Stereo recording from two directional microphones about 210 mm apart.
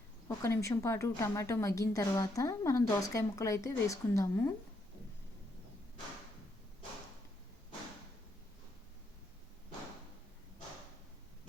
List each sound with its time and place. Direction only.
0.3 s a woman's voice: 15° left (ahead or behind)